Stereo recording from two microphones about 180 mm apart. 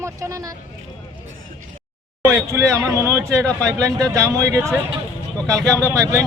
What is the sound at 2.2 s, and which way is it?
A man's voice, 15° right (ahead or behind).